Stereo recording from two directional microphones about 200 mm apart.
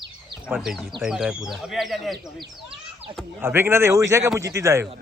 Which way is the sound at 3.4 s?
10° right (ahead or behind).